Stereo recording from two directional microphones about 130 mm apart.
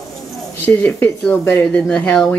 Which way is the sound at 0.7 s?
15° left (ahead or behind).